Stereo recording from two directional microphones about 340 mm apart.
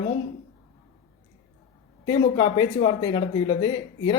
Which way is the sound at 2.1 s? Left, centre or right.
Centre.